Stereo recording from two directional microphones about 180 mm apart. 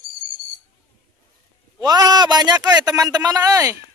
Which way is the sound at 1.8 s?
20° right (ahead or behind).